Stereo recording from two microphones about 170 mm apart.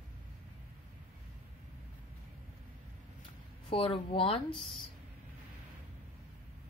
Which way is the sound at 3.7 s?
35° left (ahead or behind).